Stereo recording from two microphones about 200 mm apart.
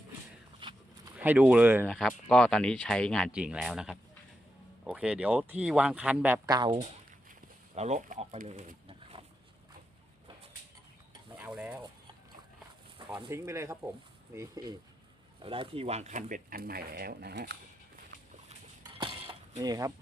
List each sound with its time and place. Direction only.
0.6 s walk: 25° right (ahead or behind)
1.2 s speech: 10° right (ahead or behind)
1.9 s speech: 5° left (ahead or behind); by 6.8 s 20° right (ahead or behind)
7.8 s speech: 40° right (ahead or behind)
11.3 s stir: 5° right (ahead or behind)
13.2 s speech: 15° right (ahead or behind); by 17.6 s 55° right (ahead or behind)
18.9 s mechanisms: 25° right (ahead or behind)